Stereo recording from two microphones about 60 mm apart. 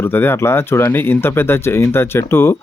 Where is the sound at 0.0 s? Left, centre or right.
Left.